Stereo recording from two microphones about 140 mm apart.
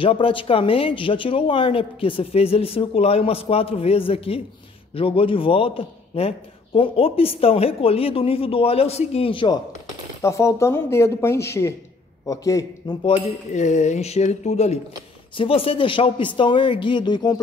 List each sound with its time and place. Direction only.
0.0 s a man's voice: 40° left (ahead or behind)
10.2 s speech: 20° left (ahead or behind)
13.5 s speech: 60° left (ahead or behind)
15.3 s speech: 40° left (ahead or behind)